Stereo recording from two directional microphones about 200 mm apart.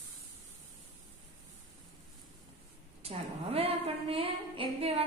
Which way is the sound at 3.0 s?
30° right (ahead or behind).